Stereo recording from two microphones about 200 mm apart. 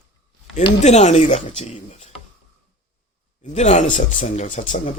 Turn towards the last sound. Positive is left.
turn(degrees=35)  # may be behind; listen again after turning